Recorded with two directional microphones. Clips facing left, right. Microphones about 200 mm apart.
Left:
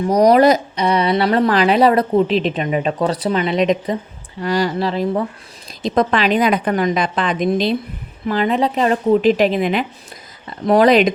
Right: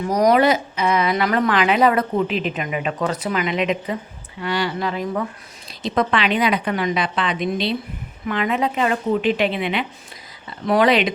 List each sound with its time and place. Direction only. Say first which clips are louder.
0.1 s a woman's voice: left 4 dB; 35° left (ahead or behind)
8.3 s speech: left 4 dB; 35° left (ahead or behind)